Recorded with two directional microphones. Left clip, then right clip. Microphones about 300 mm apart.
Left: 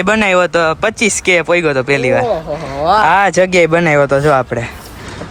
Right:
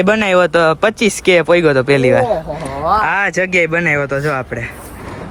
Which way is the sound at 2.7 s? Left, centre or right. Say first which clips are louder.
Left 3 dB; left.